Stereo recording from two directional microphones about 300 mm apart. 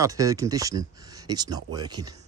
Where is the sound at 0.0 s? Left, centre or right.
Centre.